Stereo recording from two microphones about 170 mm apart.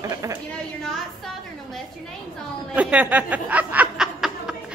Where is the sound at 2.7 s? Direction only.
10° right (ahead or behind).